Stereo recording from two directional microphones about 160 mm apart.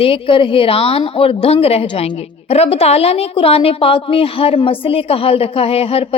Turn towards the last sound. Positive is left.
turn(degrees=35)  # may be behind; listen again after turning